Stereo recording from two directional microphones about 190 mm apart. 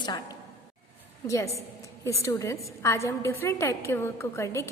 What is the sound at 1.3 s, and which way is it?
A woman's voice, 15° left (ahead or behind).